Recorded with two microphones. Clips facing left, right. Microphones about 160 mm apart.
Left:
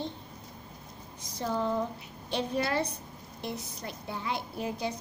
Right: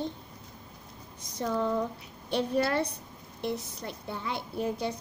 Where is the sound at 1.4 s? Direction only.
30° left (ahead or behind).